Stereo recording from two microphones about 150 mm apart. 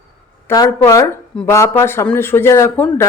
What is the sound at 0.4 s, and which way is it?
A woman's voice, 25° left (ahead or behind).